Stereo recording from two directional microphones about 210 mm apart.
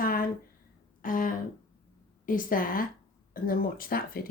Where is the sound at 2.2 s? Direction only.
40° left (ahead or behind).